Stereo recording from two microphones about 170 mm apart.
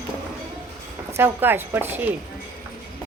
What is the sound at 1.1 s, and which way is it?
Speech, 15° right (ahead or behind).